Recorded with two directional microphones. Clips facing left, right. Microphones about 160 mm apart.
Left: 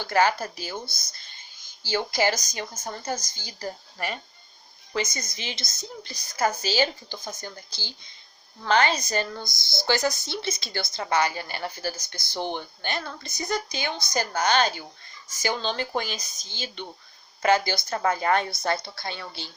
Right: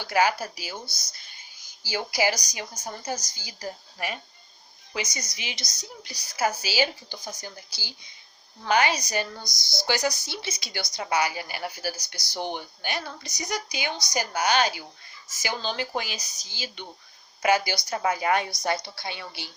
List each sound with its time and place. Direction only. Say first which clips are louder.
0.0 s speech: left 1 dB; 10° right (ahead or behind)
1.1 s a sound: left 1 dB; 10° right (ahead or behind)
2.6 s speech: left 2 dB; 10° right (ahead or behind)
5.6 s speech: left 4 dB; 50° left (ahead or behind)
6.0 s speech: left 1 dB; 10° right (ahead or behind)
9.4 s speech: left 4 dB; 55° left (ahead or behind)
10.0 s speech: left 2 dB; 10° right (ahead or behind)